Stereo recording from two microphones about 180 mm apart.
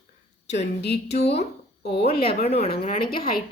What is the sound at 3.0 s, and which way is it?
Speech, 55° left (ahead or behind).